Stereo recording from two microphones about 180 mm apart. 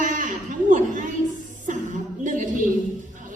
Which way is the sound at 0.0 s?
45° right (ahead or behind).